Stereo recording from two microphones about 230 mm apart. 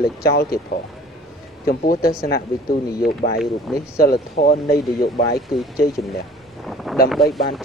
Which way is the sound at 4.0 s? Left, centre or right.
Left.